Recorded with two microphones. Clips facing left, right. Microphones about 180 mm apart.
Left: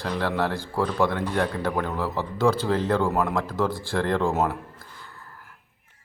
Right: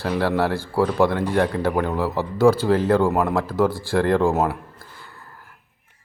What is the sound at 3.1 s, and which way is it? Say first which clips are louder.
Speech: right 4 dB; 55° right (ahead or behind).